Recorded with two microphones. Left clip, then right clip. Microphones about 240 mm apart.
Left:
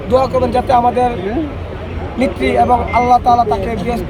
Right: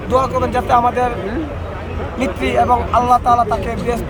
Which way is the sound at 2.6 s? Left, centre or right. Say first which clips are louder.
Left 1 dB; right.